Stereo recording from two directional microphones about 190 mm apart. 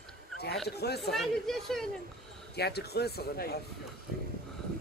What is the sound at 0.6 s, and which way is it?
Speech, 60° left (ahead or behind).